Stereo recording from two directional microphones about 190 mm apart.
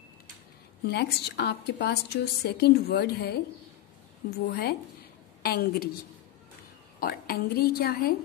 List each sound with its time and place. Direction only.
0.8 s a woman's voice: 60° left (ahead or behind)
7.0 s a woman's voice: 50° left (ahead or behind)